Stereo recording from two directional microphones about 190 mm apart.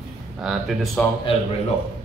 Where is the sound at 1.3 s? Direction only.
30° left (ahead or behind).